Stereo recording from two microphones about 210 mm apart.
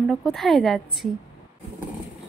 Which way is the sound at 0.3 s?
Centre (ahead or behind).